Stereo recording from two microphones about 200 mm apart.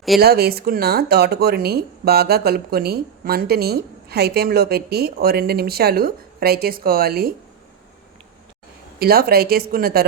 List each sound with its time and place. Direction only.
0.2 s speech: 50° right (ahead or behind)
9.0 s speech: 50° right (ahead or behind)